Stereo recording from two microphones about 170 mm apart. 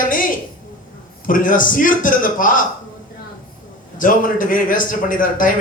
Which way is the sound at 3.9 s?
50° left (ahead or behind).